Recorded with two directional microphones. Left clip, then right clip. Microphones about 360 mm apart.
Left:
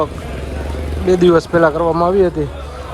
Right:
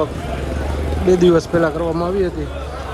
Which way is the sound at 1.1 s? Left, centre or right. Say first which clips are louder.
Left 2 dB; centre.